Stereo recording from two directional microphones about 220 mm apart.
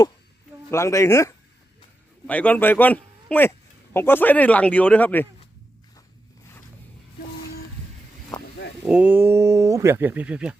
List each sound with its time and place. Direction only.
0.7 s a man's voice: 15° left (ahead or behind)
8.9 s speech: 5° right (ahead or behind)